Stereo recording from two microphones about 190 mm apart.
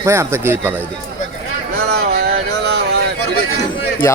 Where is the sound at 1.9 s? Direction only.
55° right (ahead or behind).